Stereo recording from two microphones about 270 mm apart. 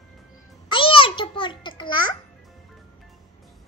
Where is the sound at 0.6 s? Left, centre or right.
Centre.